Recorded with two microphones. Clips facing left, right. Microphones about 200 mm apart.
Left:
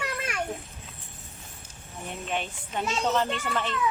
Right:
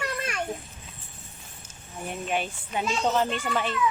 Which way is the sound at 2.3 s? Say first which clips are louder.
Right 2 dB; 10° right (ahead or behind).